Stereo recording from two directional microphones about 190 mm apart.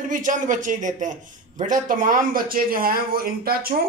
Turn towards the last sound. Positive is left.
turn(degrees=-50)  # may be behind; listen again after turning